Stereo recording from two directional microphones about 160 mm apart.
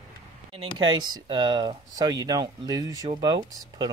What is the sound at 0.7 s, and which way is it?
Speech, 30° right (ahead or behind).